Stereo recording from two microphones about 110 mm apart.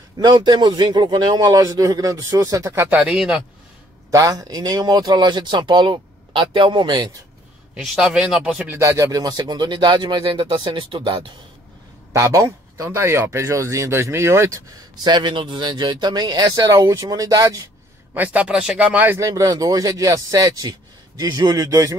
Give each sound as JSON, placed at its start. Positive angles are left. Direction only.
{"t": 0.2, "sound": "speech", "side_deg": -40}
{"t": 2.9, "sound": "a man's voice", "side_deg": -10}
{"t": 4.1, "sound": "speech", "side_deg": -30}
{"t": 7.7, "sound": "a man's voice", "side_deg": -5}
{"t": 8.7, "sound": "speech", "side_deg": -30}
{"t": 10.2, "sound": "speech", "side_deg": -50}
{"t": 12.1, "sound": "speech", "side_deg": -25}
{"t": 15.0, "sound": "speech", "side_deg": -45}
{"t": 18.1, "sound": "speech", "side_deg": -15}